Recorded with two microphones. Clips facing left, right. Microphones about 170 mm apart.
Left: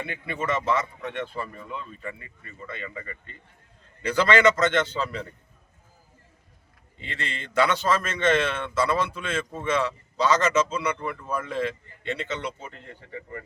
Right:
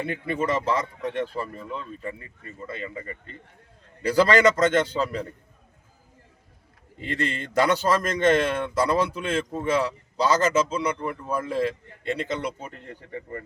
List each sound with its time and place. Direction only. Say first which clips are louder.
0.0 s speech: right 5 dB; 40° right (ahead or behind)
7.0 s speech: right 7 dB; 40° right (ahead or behind)